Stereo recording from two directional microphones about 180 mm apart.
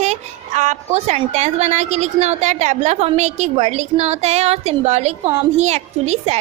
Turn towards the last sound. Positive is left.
turn(degrees=-40)  # may be behind; listen again after turning